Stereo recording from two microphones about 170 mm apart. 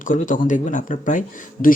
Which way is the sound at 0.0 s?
50° left (ahead or behind).